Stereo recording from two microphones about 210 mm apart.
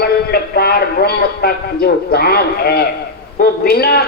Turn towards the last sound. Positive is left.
turn(degrees=45)  # may be behind; listen again after turning